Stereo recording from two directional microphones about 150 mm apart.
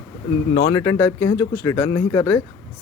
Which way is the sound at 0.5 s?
30° left (ahead or behind).